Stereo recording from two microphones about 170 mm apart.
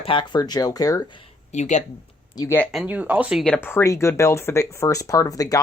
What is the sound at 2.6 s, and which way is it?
Speech, centre (ahead or behind).